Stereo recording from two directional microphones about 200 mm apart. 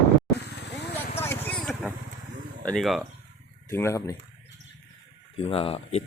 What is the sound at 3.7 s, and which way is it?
Speech, 15° left (ahead or behind).